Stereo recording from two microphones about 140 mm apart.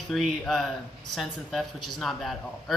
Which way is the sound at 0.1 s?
Centre (ahead or behind).